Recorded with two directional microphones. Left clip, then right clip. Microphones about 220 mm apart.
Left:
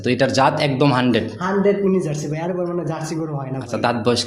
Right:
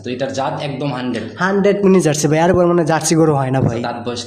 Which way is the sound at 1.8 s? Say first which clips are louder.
Right 7 dB; 50° right (ahead or behind).